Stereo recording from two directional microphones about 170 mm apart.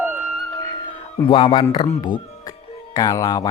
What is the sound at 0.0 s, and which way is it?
Music, 10° right (ahead or behind).